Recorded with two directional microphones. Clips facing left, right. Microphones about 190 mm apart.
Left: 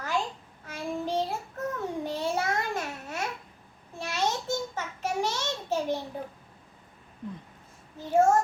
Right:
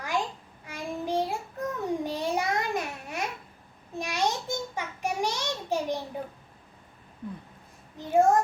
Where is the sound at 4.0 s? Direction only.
15° right (ahead or behind).